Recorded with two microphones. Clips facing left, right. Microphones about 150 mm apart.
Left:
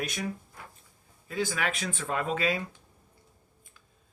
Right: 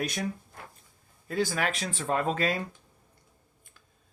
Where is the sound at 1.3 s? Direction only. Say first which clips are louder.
Right 2 dB; 45° right (ahead or behind).